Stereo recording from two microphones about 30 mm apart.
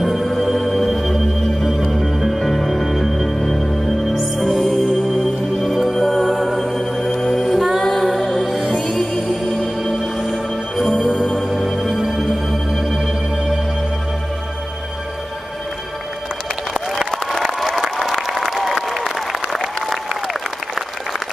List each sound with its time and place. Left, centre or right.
0.2 s music: centre
8.7 s music: centre
9.1 s music: centre
11.0 s music: right
11.4 s music: centre
12.4 s organ: centre
17.4 s applause: centre